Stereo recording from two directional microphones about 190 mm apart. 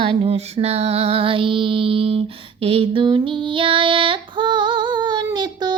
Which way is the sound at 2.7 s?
30° right (ahead or behind).